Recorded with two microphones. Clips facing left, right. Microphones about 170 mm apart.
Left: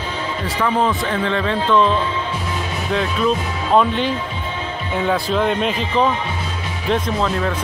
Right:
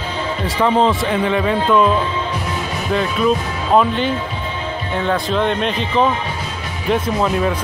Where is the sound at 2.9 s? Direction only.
Centre (ahead or behind).